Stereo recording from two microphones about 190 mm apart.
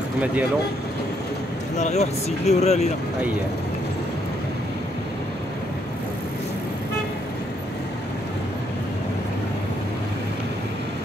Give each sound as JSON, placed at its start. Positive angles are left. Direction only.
{"t": 1.8, "sound": "speech", "side_deg": 35}